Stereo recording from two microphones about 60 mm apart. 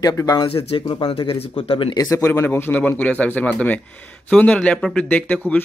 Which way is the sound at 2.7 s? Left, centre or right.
Left.